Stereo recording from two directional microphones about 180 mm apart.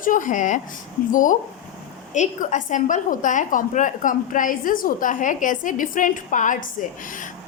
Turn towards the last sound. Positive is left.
turn(degrees=45)  # may be behind; listen again after turning